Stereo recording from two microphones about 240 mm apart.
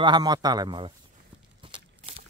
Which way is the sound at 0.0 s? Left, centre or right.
Centre.